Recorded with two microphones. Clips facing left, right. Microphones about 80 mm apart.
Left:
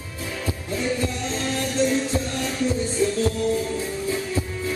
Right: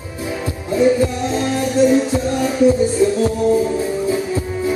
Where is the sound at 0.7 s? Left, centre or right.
Centre.